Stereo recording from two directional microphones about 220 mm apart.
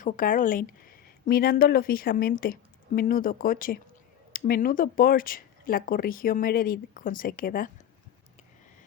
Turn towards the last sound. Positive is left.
turn(degrees=40)  # may be behind; listen again after turning